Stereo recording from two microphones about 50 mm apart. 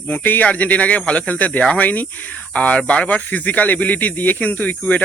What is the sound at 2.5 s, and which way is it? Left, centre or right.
Speech, left.